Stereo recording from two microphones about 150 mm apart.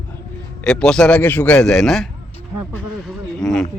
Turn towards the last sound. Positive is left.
turn(degrees=0)  # may be behind; listen again after turning